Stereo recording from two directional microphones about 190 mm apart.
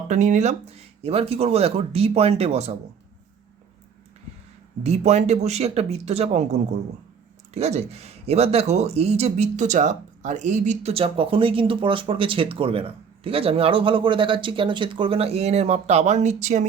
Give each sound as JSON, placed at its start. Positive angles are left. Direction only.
{"t": 0.1, "sound": "speech", "side_deg": -40}
{"t": 4.8, "sound": "speech", "side_deg": -35}